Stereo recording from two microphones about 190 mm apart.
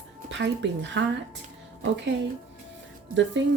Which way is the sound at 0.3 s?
70° right (ahead or behind).